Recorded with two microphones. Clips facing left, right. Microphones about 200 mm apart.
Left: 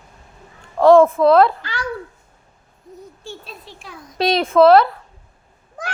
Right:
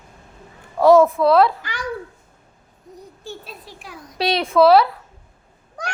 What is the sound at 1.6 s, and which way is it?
Speech, 15° right (ahead or behind).